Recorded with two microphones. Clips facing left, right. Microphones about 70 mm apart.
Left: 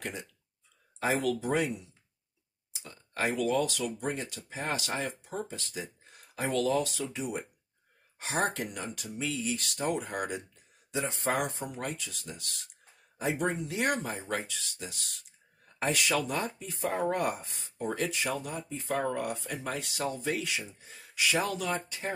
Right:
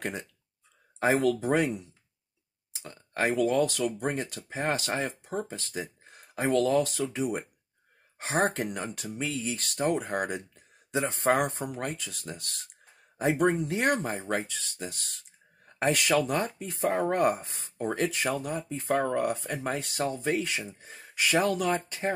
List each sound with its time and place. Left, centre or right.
0.0 s speech: right
3.4 s speech: right